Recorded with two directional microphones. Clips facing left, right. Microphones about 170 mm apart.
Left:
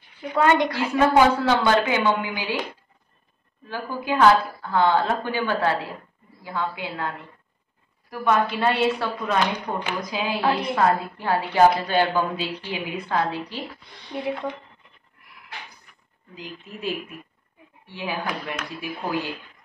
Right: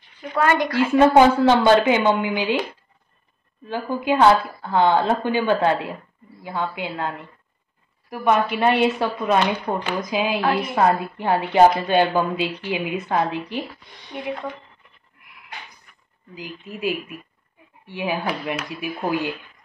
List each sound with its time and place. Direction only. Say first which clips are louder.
0.2 s a woman's voice: left 1 dB; 15° left (ahead or behind)
0.9 s a woman's voice: right 4 dB; 25° right (ahead or behind)
3.6 s a woman's voice: right 5 dB; 20° right (ahead or behind)
8.1 s a woman's voice: right 2 dB; 20° right (ahead or behind)
17.8 s speech: right 4 dB; 15° right (ahead or behind)